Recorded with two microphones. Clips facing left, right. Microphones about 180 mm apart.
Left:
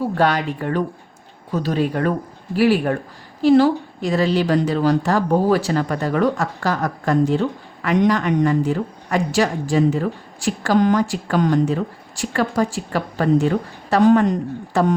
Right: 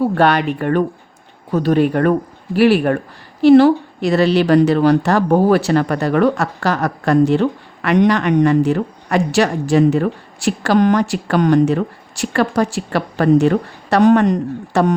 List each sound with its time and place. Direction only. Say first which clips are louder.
0.0 s a woman's voice: right 4 dB; 65° right (ahead or behind)